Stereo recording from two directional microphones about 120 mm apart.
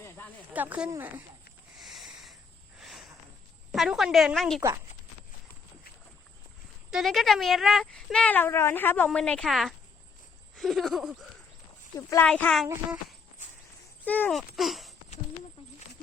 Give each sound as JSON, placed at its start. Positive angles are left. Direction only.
{"t": 0.5, "sound": "speech", "side_deg": -15}
{"t": 1.8, "sound": "a sound", "side_deg": 0}
{"t": 3.7, "sound": "speech", "side_deg": 0}
{"t": 6.9, "sound": "speech", "side_deg": 0}
{"t": 12.2, "sound": "speech", "side_deg": 10}
{"t": 14.0, "sound": "speech", "side_deg": 15}
{"t": 14.3, "sound": "speech", "side_deg": 0}